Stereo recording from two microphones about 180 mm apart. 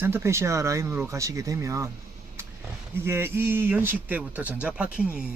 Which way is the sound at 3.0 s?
15° right (ahead or behind).